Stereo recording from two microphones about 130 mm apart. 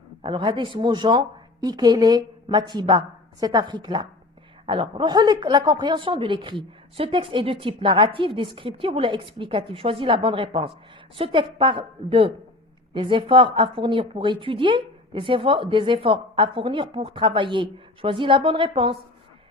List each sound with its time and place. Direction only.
0.2 s a woman's voice: 40° right (ahead or behind)